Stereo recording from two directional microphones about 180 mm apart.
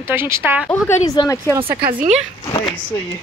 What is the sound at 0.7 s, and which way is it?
Speech, 15° left (ahead or behind).